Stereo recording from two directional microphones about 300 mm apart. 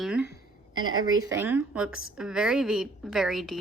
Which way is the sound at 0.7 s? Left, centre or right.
Right.